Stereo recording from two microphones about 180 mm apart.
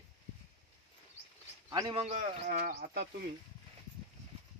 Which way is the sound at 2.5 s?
65° right (ahead or behind).